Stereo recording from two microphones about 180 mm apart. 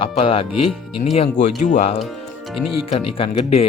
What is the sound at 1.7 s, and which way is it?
Speech, 40° left (ahead or behind).